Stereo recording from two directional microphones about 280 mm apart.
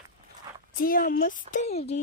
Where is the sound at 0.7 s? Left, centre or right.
Left.